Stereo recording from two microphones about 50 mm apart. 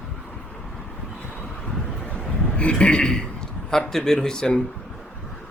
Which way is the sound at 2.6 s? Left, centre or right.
Left.